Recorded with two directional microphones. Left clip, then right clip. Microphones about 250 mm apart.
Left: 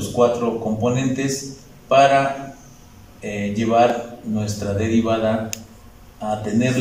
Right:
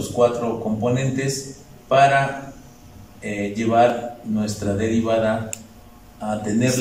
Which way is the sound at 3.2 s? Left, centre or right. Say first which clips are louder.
Even; centre.